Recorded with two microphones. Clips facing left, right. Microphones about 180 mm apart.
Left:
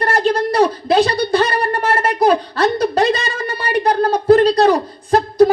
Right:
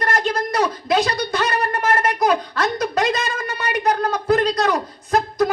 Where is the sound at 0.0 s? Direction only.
30° left (ahead or behind).